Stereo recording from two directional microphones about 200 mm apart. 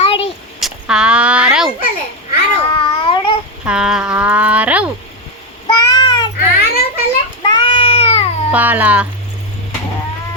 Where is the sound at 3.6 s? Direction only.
5° right (ahead or behind).